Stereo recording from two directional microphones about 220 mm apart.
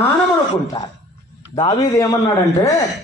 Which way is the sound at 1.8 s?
15° left (ahead or behind).